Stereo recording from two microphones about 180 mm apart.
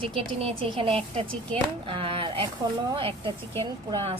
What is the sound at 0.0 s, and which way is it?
A woman's voice, 30° right (ahead or behind).